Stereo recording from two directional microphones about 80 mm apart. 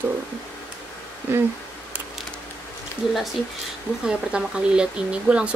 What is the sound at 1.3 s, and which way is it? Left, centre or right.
Speech, right.